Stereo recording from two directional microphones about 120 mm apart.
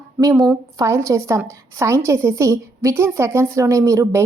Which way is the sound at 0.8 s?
25° right (ahead or behind).